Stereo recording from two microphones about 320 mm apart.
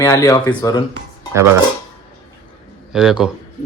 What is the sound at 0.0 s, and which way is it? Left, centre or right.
Speech, centre.